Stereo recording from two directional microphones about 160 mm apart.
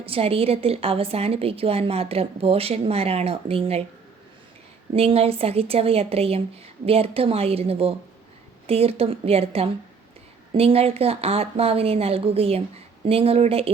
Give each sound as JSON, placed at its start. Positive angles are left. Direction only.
{"t": 0.0, "sound": "a woman's voice", "side_deg": -35}
{"t": 4.9, "sound": "a woman's voice", "side_deg": -40}